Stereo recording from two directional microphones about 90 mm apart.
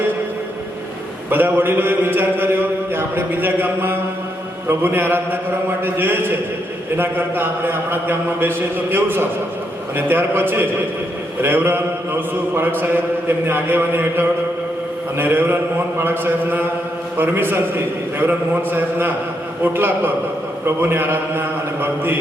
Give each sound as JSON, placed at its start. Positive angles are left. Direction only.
{"t": 1.3, "sound": "mantra", "side_deg": -20}
{"t": 20.7, "sound": "a man's voice", "side_deg": -25}